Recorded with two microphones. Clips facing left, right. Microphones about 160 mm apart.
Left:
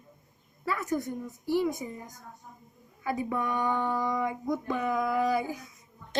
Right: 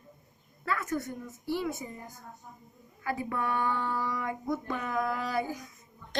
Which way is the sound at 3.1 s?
15° left (ahead or behind).